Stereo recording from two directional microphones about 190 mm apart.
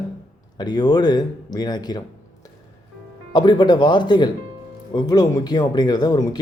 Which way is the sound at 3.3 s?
25° left (ahead or behind).